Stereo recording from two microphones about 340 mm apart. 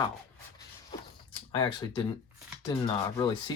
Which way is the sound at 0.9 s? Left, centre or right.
Centre.